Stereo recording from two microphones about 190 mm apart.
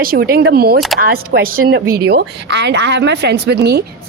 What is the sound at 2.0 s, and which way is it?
A man's voice, 60° right (ahead or behind).